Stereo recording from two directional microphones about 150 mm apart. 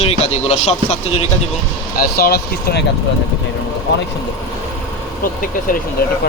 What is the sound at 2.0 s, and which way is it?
Speech, 90° left.